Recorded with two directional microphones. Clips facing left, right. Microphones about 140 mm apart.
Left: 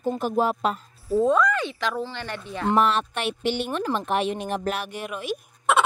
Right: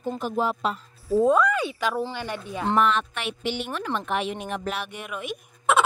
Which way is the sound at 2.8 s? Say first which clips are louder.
Even; 35° left (ahead or behind).